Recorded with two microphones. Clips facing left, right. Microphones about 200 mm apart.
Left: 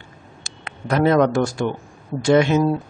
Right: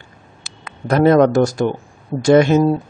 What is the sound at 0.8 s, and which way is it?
A man's voice, 40° right (ahead or behind).